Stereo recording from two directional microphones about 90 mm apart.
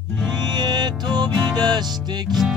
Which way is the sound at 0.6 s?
50° right (ahead or behind).